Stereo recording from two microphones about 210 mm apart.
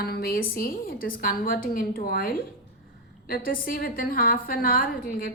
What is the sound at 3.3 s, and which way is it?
A woman's voice, 40° left (ahead or behind).